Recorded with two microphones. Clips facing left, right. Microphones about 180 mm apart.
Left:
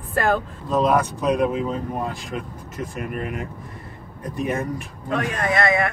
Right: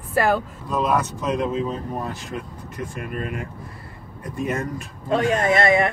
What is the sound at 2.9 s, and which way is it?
Speech, 20° left (ahead or behind).